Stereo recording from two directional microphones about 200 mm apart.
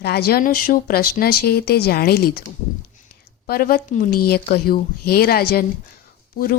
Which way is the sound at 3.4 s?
50° left (ahead or behind).